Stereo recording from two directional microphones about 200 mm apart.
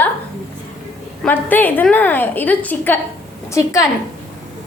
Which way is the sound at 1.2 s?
10° left (ahead or behind).